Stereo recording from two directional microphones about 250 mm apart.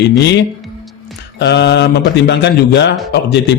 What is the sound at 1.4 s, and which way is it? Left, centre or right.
Speech, left.